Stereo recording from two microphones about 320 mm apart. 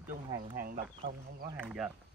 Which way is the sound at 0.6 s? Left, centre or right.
Right.